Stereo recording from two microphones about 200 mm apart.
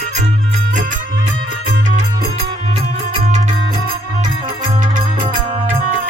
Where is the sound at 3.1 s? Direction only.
35° right (ahead or behind).